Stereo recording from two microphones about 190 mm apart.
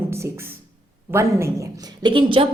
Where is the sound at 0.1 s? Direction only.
15° right (ahead or behind).